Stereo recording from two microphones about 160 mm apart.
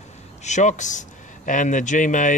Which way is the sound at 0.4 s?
45° left (ahead or behind).